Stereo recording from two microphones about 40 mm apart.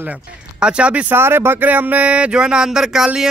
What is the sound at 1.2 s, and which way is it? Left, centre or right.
Speech, right.